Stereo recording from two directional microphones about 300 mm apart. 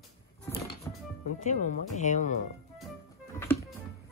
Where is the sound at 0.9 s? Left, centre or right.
Centre.